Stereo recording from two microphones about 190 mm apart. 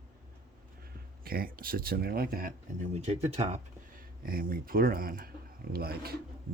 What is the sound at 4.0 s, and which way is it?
Speech, 50° right (ahead or behind).